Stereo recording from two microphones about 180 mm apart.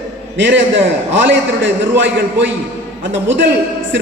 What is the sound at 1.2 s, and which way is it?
A man's voice, 90° right.